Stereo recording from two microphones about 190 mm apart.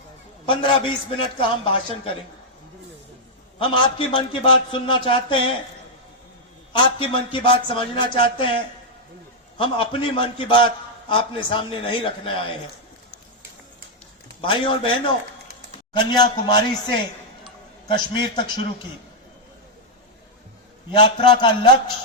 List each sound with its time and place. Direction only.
0.4 s a man's voice: 25° left (ahead or behind)
3.6 s a man's voice: 25° left (ahead or behind)
6.7 s a man's voice: 25° left (ahead or behind)
9.6 s a man's voice: 25° left (ahead or behind)
14.4 s a man's voice: 25° left (ahead or behind)
17.8 s a man's voice: 25° left (ahead or behind)
20.9 s a man's voice: 25° left (ahead or behind)